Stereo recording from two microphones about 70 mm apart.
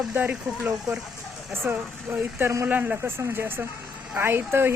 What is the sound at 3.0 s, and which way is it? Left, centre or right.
Speech, right.